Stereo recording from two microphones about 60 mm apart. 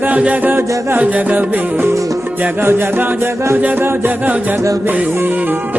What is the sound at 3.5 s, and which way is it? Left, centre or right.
Music, right.